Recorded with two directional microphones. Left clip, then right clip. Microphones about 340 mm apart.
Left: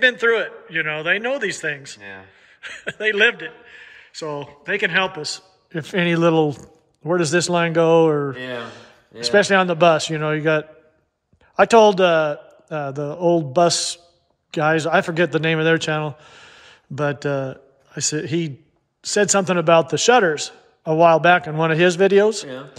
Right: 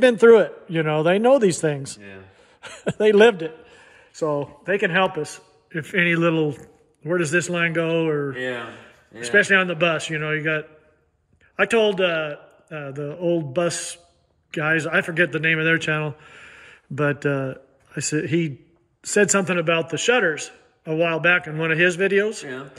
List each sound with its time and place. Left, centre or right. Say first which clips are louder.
0.0 s a man's voice: right 4 dB; centre
2.8 s a man's voice: right 3 dB; centre